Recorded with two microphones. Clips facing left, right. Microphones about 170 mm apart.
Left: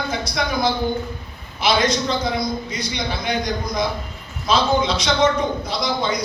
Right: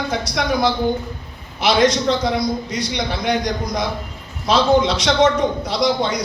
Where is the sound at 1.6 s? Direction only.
75° right (ahead or behind).